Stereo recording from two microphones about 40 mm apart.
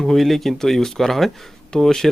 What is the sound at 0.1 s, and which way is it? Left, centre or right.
Speech, centre.